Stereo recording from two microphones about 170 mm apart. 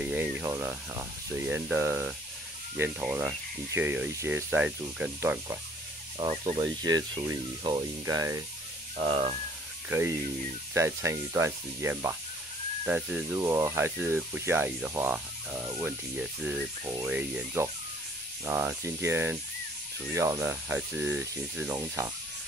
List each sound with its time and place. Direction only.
0.0 s speech: 10° right (ahead or behind)
6.1 s sizzle: 35° right (ahead or behind)
6.8 s speech: 25° right (ahead or behind)
9.0 s sizzle: 30° right (ahead or behind)
9.8 s speech: 15° right (ahead or behind)